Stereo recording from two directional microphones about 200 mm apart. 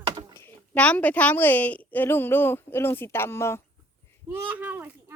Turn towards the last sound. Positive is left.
turn(degrees=-10)  # may be behind; listen again after turning